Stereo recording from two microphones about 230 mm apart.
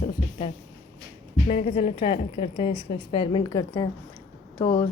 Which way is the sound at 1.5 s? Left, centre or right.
Left.